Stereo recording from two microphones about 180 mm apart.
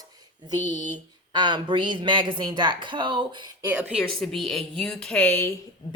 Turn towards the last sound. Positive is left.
turn(degrees=10)  # may be behind; listen again after turning